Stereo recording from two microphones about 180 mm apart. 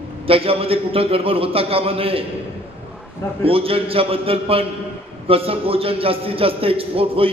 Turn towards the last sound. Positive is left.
turn(degrees=-30)  # may be behind; listen again after turning